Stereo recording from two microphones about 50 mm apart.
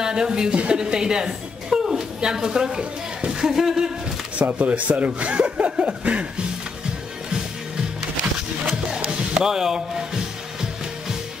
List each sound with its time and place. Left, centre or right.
0.0 s a woman's voice: centre
4.4 s speech: right
9.4 s music: centre